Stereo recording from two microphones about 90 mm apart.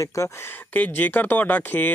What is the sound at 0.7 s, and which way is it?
Speech, 20° left (ahead or behind).